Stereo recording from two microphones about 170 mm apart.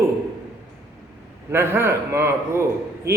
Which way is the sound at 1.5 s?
15° right (ahead or behind).